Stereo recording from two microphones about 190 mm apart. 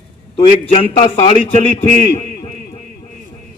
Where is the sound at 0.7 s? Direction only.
30° left (ahead or behind).